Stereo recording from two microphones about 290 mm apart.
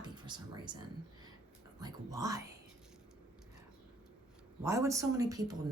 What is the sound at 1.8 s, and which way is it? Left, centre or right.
Speech, centre.